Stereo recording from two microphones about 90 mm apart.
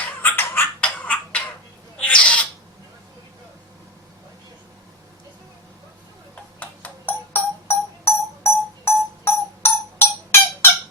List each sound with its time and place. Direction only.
0.2 s a sound: 20° left (ahead or behind)
0.9 s frog: 15° left (ahead or behind)
2.0 s bird: 15° left (ahead or behind)
6.6 s music: 20° left (ahead or behind)